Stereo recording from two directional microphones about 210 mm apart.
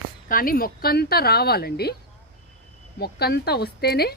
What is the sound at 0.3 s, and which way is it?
Speech, 45° left (ahead or behind).